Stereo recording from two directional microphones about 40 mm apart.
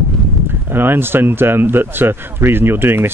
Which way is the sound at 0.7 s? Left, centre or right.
Right.